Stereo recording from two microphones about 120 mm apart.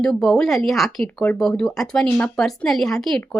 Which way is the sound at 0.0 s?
5° left (ahead or behind).